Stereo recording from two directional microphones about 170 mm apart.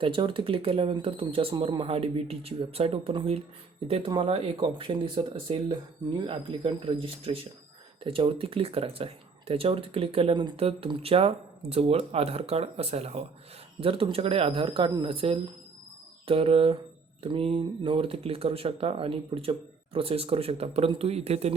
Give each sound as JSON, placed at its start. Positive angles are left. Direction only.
{"t": 0.0, "sound": "speech", "side_deg": -30}